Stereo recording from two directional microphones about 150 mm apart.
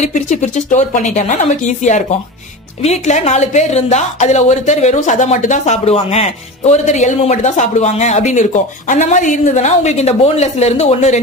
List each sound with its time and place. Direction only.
0.0 s speech: 50° left (ahead or behind)